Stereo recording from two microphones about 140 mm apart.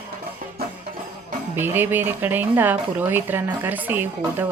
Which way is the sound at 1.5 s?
15° right (ahead or behind).